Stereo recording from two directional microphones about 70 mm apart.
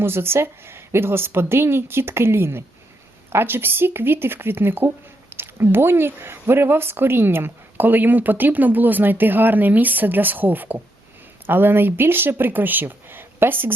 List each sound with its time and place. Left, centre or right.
0.0 s a woman's voice: right